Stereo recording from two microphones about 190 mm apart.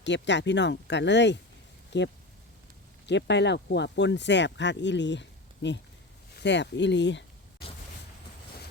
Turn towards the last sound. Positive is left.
turn(degrees=70)  # may be behind; listen again after turning